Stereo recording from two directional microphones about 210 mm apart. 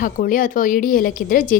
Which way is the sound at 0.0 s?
40° left (ahead or behind).